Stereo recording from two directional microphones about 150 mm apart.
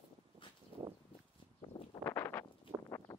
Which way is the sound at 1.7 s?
25° left (ahead or behind).